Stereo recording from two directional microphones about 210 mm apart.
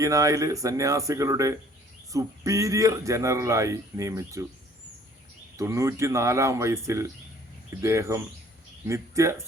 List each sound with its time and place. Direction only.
0.0 s speech: 15° right (ahead or behind)
5.5 s speech: 15° right (ahead or behind)